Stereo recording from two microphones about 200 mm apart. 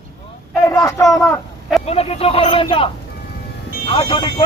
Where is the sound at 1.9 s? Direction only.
30° left (ahead or behind).